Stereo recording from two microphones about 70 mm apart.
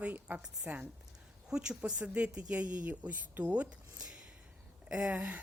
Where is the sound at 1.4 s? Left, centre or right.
Centre.